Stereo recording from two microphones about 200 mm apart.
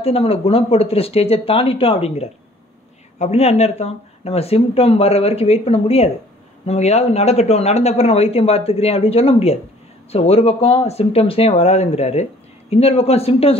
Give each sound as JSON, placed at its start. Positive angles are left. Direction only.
{"t": 0.0, "sound": "speech", "side_deg": 30}